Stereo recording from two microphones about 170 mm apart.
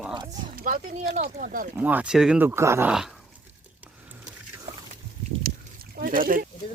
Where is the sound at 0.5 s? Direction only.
55° right (ahead or behind).